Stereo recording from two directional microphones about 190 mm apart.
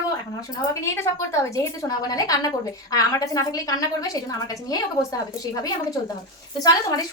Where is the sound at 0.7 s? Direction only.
15° left (ahead or behind).